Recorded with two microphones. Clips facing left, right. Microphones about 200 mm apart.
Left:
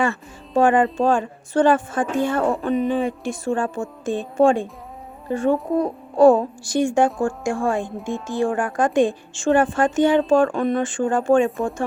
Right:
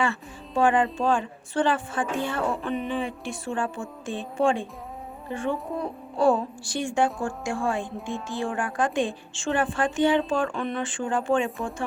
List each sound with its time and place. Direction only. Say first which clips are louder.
0.0 s a woman's voice: left 4 dB; 45° left (ahead or behind)